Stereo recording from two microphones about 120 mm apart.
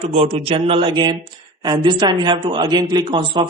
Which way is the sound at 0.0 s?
60° right (ahead or behind).